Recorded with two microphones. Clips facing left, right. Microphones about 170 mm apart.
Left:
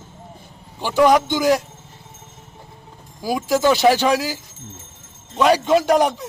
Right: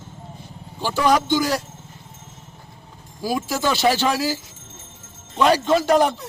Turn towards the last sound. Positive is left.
turn(degrees=15)  # may be behind; listen again after turning